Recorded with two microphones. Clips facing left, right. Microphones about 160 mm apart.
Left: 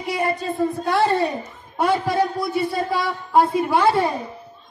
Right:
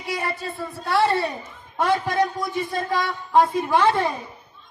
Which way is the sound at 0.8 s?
15° left (ahead or behind).